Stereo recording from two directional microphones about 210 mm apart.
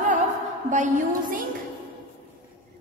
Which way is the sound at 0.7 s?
40° right (ahead or behind).